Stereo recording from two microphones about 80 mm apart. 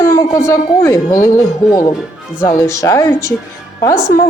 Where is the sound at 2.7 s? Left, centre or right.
Left.